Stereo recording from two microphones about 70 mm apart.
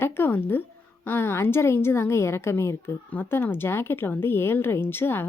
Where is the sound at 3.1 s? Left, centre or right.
Left.